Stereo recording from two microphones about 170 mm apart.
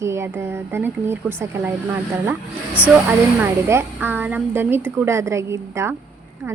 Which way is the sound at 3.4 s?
15° right (ahead or behind).